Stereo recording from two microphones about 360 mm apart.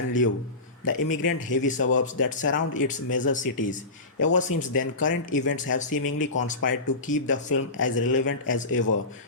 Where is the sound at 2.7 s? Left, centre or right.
Left.